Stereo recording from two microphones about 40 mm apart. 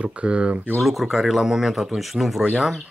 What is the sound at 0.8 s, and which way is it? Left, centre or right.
Speech, centre.